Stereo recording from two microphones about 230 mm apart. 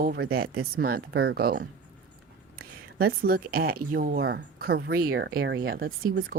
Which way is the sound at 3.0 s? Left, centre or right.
Right.